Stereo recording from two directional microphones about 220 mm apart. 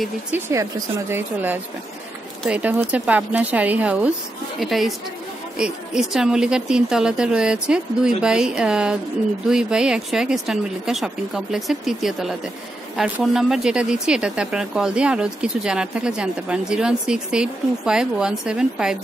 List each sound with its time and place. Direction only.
0.5 s speech: 15° right (ahead or behind)